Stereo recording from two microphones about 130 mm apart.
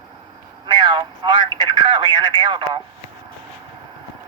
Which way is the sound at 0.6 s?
35° right (ahead or behind).